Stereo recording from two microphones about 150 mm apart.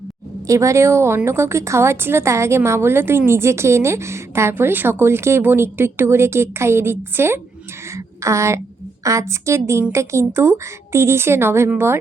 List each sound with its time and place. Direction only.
0.4 s a woman's voice: 20° right (ahead or behind)
7.9 s a sound: 20° right (ahead or behind)
9.0 s a woman's voice: 20° right (ahead or behind)